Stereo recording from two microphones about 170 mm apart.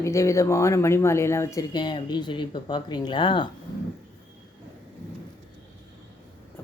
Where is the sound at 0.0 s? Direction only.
20° left (ahead or behind).